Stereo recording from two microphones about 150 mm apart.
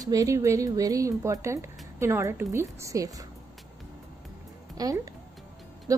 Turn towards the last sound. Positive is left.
turn(degrees=-25)  # may be behind; listen again after turning